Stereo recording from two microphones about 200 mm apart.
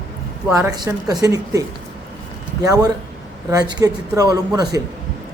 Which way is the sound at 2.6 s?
15° right (ahead or behind).